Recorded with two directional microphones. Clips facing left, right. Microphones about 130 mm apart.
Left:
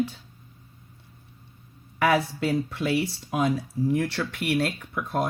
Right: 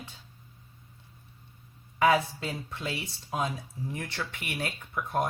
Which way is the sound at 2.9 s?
70° left (ahead or behind).